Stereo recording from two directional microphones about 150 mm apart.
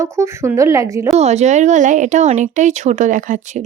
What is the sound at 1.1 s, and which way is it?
Speech, 45° right (ahead or behind).